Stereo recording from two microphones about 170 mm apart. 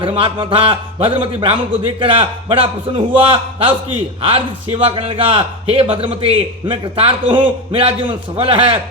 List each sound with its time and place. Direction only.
0.0 s a man's voice: 30° right (ahead or behind)